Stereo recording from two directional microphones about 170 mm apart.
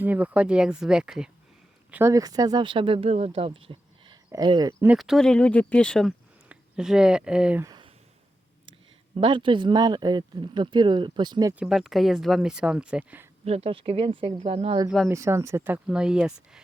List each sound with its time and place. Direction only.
0.0 s speech: 10° right (ahead or behind)
1.9 s speech: 15° right (ahead or behind)
4.9 s speech: centre (ahead or behind)
7.6 s a sound: 25° right (ahead or behind)
9.2 s speech: 30° right (ahead or behind)
11.6 s speech: centre (ahead or behind)
13.4 s speech: 35° right (ahead or behind)
14.8 s speech: centre (ahead or behind)
15.1 s speech: 15° right (ahead or behind)